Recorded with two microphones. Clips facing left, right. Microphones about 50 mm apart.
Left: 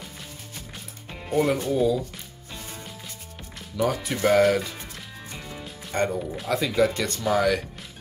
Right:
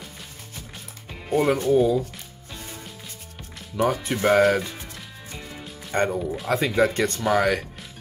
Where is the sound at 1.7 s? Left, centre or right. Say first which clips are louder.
Right 4 dB; right.